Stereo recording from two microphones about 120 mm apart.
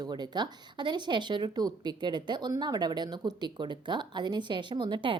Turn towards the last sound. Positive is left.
turn(degrees=-40)  # may be behind; listen again after turning